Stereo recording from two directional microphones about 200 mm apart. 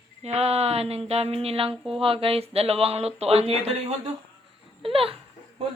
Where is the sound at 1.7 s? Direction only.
Centre (ahead or behind).